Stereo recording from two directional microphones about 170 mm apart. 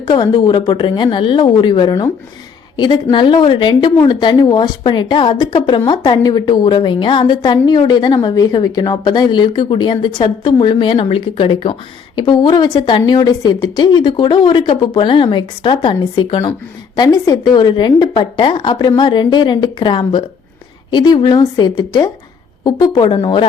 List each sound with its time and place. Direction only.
0.0 s a woman's voice: 25° left (ahead or behind)